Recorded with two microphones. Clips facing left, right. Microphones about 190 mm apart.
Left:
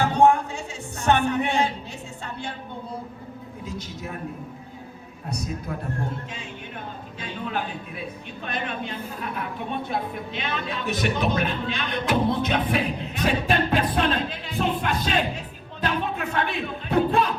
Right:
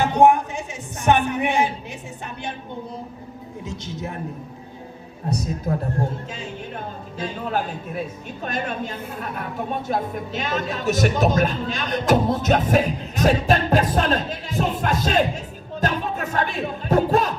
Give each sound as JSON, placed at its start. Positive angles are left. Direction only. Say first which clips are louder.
{"t": 0.0, "sound": "music", "louder": "right 2 dB", "side_deg": -15}
{"t": 6.7, "sound": "a man's voice", "louder": "right 5 dB", "side_deg": -40}